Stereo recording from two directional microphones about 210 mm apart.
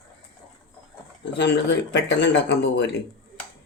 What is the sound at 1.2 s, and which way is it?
Speech, 55° left (ahead or behind).